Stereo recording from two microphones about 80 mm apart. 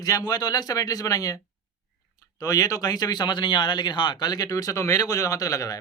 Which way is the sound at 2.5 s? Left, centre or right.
Left.